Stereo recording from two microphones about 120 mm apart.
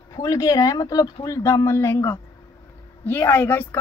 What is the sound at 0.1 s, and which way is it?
A woman's voice, 30° left (ahead or behind).